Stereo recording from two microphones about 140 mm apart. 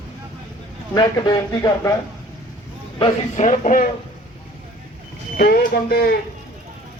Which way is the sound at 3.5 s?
65° left (ahead or behind).